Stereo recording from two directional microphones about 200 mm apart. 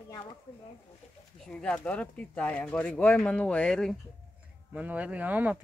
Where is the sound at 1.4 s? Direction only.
5° left (ahead or behind).